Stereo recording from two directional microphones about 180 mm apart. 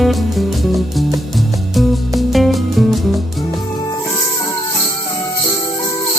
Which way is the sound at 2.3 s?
Centre (ahead or behind).